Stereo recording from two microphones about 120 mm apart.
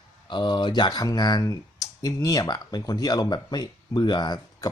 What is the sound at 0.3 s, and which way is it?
Speech, 40° left (ahead or behind).